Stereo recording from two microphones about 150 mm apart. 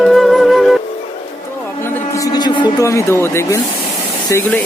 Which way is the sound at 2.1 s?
25° left (ahead or behind).